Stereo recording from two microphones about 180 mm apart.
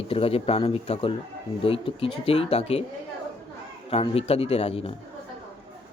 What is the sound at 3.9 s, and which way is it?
Speech, 35° left (ahead or behind).